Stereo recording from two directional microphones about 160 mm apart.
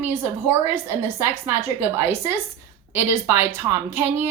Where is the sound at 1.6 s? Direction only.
40° right (ahead or behind).